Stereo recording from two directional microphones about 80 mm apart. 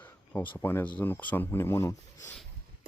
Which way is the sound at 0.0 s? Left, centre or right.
Left.